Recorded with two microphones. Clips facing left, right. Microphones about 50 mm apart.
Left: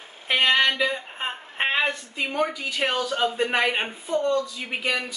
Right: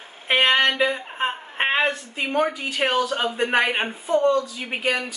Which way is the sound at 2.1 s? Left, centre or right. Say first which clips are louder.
Right 3 dB; centre.